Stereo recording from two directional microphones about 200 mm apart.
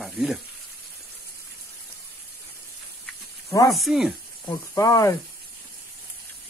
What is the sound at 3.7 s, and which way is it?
Speech, centre (ahead or behind).